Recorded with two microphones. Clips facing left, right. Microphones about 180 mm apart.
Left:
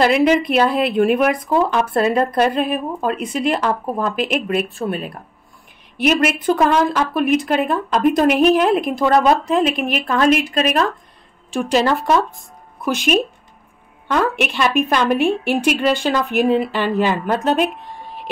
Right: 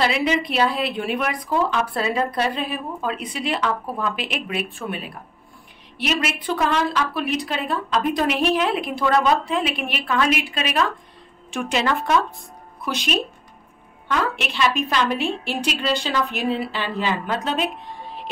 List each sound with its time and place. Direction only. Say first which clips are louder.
0.0 s speech: left 7 dB; 50° left (ahead or behind)
5.9 s a woman's voice: left 8 dB; 50° left (ahead or behind)
14.4 s speech: left 5 dB; 50° left (ahead or behind)